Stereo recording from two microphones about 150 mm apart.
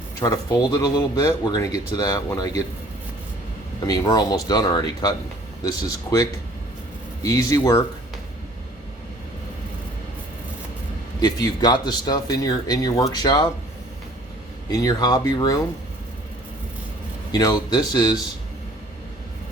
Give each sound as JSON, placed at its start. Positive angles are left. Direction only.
{"t": 0.2, "sound": "speech", "side_deg": 20}
{"t": 3.8, "sound": "speech", "side_deg": 25}
{"t": 11.2, "sound": "speech", "side_deg": 25}
{"t": 14.7, "sound": "speech", "side_deg": 25}
{"t": 17.3, "sound": "speech", "side_deg": 25}